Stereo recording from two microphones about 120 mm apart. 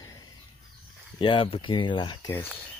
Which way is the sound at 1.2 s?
45° left (ahead or behind).